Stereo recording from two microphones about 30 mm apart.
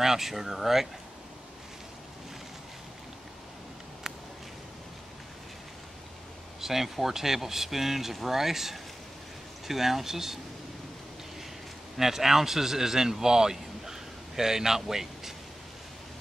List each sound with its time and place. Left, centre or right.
0.0 s speech: centre
4.1 s walk: right
6.6 s speech: centre
12.0 s speech: centre